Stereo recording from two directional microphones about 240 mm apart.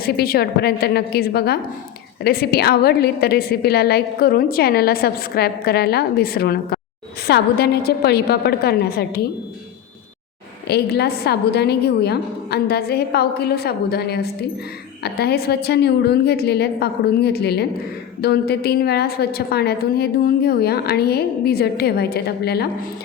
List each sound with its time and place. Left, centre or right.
0.0 s a woman's voice: left
10.7 s a woman's voice: left